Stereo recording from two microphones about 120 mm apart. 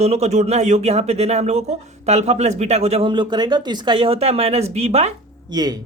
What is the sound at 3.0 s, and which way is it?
Speech, 40° right (ahead or behind).